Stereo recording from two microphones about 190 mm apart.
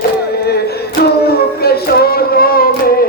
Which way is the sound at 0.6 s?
55° left (ahead or behind).